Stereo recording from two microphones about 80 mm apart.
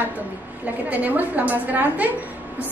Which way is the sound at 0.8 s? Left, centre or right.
Right.